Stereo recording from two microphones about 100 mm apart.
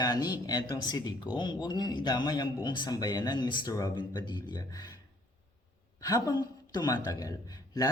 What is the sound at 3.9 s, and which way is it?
Speech, 50° left (ahead or behind).